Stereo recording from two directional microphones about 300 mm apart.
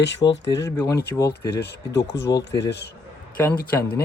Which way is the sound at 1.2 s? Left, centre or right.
Left.